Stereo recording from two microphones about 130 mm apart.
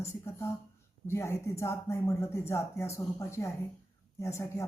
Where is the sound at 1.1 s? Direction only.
20° left (ahead or behind).